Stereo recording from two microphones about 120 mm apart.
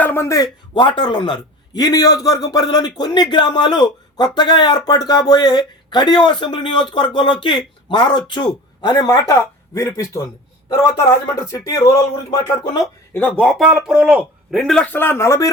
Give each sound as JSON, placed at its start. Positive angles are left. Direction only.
{"t": 0.0, "sound": "speech", "side_deg": 20}
{"t": 0.7, "sound": "a man's voice", "side_deg": 40}
{"t": 11.4, "sound": "speech", "side_deg": 25}
{"t": 13.1, "sound": "a man's voice", "side_deg": 15}
{"t": 13.4, "sound": "a man's voice", "side_deg": 0}
{"t": 14.7, "sound": "a man's voice", "side_deg": 10}
{"t": 14.9, "sound": "speech", "side_deg": 20}